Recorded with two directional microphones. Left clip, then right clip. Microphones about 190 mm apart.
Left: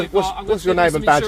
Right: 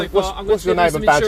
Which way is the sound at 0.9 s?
30° left (ahead or behind).